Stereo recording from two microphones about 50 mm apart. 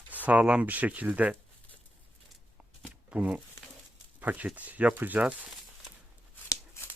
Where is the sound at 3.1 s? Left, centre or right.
Right.